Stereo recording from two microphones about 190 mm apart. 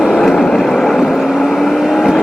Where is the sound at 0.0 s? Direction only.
Centre (ahead or behind).